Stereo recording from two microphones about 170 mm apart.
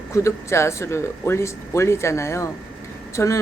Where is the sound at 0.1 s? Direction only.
15° left (ahead or behind).